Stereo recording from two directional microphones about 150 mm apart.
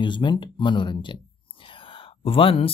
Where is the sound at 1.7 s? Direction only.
35° left (ahead or behind).